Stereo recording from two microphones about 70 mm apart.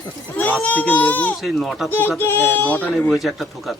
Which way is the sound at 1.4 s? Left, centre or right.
Centre.